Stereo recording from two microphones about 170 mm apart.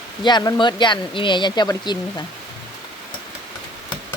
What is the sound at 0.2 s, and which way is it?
Speech, 25° left (ahead or behind).